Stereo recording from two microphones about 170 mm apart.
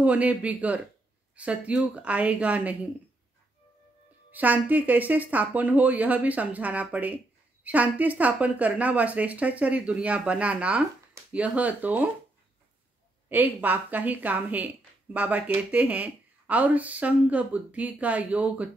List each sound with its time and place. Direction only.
0.0 s speech: 10° right (ahead or behind)
4.3 s speech: 10° right (ahead or behind)
13.3 s speech: 10° right (ahead or behind)